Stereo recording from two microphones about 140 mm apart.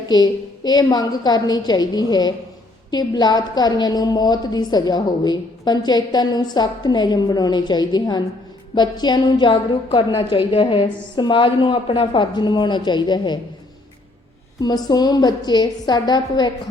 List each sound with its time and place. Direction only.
0.1 s a woman's voice: 30° left (ahead or behind)
14.6 s a woman's voice: 30° left (ahead or behind)